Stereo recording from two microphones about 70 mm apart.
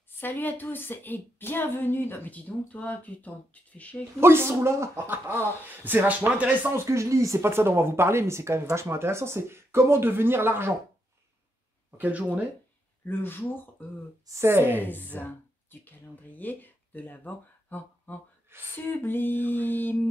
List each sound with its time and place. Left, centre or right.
0.2 s speech: left
4.2 s speech: right
6.7 s speech: right
12.0 s speech: right
13.0 s speech: left
14.4 s speech: right
14.8 s speech: left